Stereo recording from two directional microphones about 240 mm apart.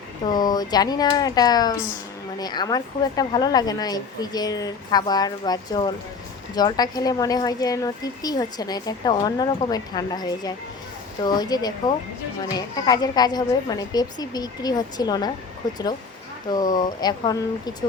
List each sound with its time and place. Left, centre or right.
0.3 s speech: centre
16.7 s speech: centre